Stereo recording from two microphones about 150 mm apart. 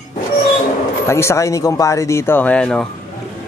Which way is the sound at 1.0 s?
20° left (ahead or behind).